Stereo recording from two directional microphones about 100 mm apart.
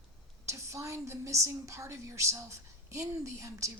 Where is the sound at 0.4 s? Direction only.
30° right (ahead or behind).